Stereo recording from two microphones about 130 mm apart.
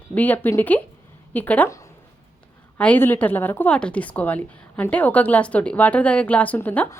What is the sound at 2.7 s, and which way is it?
A woman's voice, 10° left (ahead or behind).